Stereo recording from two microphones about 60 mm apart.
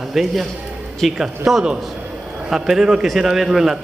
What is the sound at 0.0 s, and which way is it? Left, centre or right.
A man's voice, centre.